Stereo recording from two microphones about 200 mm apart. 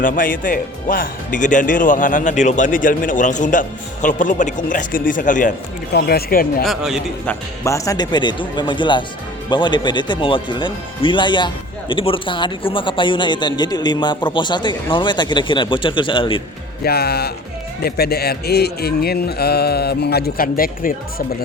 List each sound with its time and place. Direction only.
0.0 s speech: 40° left (ahead or behind)
5.9 s speech: 55° left (ahead or behind)
6.7 s a man's voice: centre (ahead or behind)
7.3 s speech: 15° left (ahead or behind)
16.8 s speech: 50° left (ahead or behind)